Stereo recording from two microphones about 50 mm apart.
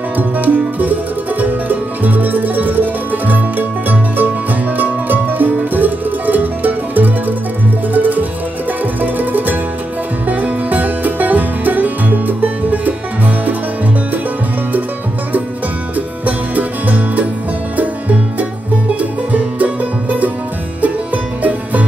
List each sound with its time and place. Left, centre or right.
0.2 s music: right
16.3 s music: right